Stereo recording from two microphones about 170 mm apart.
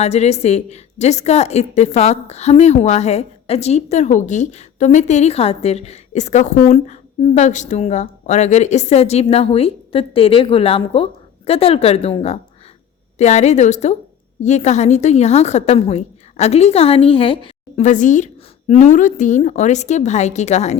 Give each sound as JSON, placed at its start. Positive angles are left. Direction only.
{"t": 0.0, "sound": "a woman's voice", "side_deg": 40}
{"t": 17.8, "sound": "a woman's voice", "side_deg": 45}